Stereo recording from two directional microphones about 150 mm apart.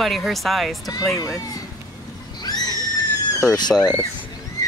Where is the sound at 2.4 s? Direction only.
25° left (ahead or behind).